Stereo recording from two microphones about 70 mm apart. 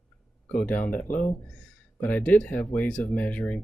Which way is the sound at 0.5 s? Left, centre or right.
Left.